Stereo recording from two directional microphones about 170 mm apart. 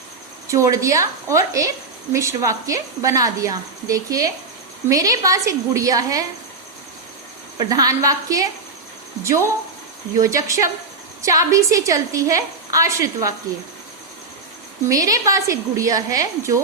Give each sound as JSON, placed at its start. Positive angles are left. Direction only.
{"t": 0.4, "sound": "a woman's voice", "side_deg": -20}
{"t": 7.6, "sound": "a woman's voice", "side_deg": -20}
{"t": 14.8, "sound": "a woman's voice", "side_deg": -20}